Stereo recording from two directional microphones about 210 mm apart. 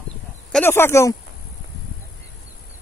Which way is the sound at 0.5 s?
10° left (ahead or behind).